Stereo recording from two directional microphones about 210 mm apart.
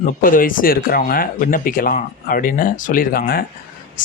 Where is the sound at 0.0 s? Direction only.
40° left (ahead or behind).